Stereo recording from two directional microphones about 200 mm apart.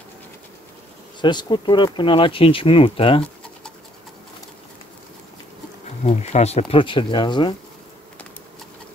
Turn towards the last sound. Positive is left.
turn(degrees=25)  # may be behind; listen again after turning